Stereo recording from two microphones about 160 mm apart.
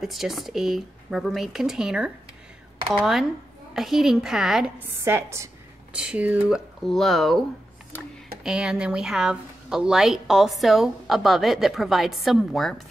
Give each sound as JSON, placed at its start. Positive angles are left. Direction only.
{"t": 0.0, "sound": "speech", "side_deg": 0}
{"t": 5.0, "sound": "a woman's voice", "side_deg": -15}
{"t": 8.5, "sound": "speech", "side_deg": -5}